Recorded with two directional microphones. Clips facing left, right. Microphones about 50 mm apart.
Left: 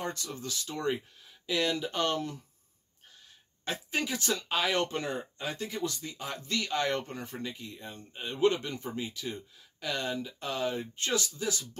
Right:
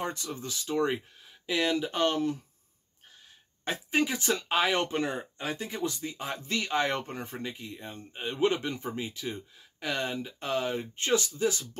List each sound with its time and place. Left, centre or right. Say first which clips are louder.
0.0 s speech: right 2 dB; right
3.6 s speech: right 5 dB; right